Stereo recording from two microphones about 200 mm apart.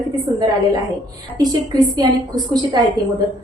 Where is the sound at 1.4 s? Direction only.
20° right (ahead or behind).